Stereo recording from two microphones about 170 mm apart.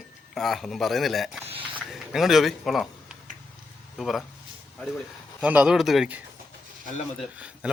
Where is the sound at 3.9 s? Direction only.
Centre (ahead or behind).